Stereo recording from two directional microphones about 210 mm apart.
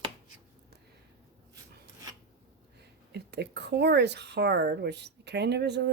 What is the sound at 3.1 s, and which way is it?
Speech, 55° right (ahead or behind).